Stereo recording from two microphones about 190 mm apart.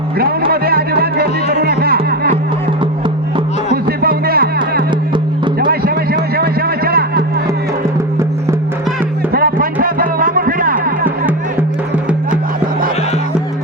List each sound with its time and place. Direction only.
0.2 s music: 55° right (ahead or behind)
3.8 s music: 55° right (ahead or behind)
6.3 s a sound: 55° right (ahead or behind)
9.3 s music: 50° right (ahead or behind)